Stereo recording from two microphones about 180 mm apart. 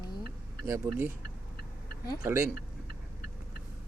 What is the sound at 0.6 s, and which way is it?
Speech, 15° right (ahead or behind).